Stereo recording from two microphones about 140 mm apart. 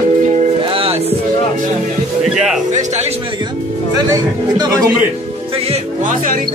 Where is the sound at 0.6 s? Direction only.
40° right (ahead or behind).